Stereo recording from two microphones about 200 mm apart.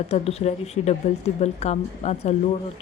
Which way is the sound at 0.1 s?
30° left (ahead or behind).